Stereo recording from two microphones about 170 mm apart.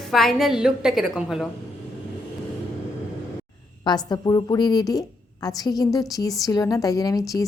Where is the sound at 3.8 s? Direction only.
25° left (ahead or behind).